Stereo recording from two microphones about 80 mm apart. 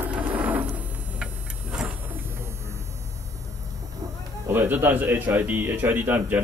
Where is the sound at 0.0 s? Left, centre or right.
Centre.